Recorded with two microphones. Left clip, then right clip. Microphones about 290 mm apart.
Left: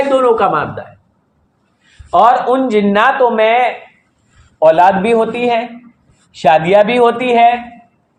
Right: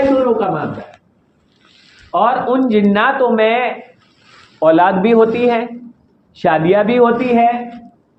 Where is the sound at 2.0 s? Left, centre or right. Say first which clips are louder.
Left 5 dB; left.